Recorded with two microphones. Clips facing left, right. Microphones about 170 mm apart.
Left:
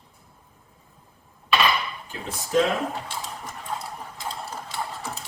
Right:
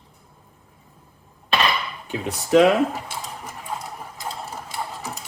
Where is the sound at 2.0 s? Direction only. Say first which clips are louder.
Right 9 dB; 70° right (ahead or behind).